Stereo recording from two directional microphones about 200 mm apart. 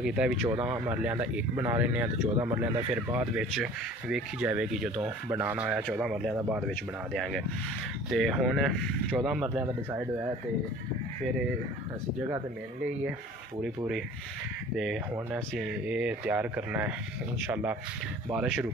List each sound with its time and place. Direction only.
0.0 s speech: 5° right (ahead or behind)
2.2 s speech: 30° right (ahead or behind)
2.5 s speech: 5° right (ahead or behind)
15.3 s speech: 5° right (ahead or behind)